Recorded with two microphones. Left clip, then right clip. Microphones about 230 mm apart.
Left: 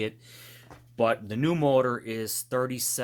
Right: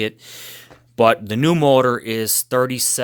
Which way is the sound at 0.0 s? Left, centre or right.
Right.